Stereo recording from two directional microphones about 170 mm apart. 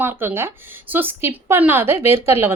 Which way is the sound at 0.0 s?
15° right (ahead or behind).